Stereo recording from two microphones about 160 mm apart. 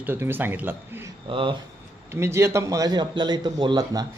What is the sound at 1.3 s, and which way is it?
Speech, 30° right (ahead or behind).